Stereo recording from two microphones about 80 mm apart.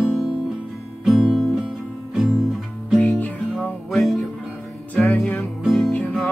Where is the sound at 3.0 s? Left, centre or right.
Left.